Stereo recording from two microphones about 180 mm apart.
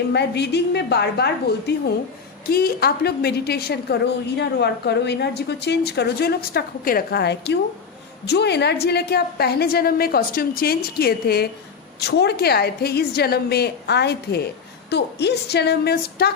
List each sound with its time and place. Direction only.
0.1 s a woman's voice: 70° left (ahead or behind)